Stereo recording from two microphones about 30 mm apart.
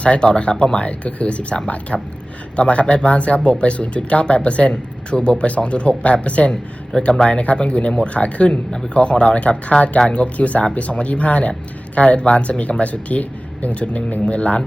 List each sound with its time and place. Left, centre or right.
0.0 s speech: left
6.9 s speech: left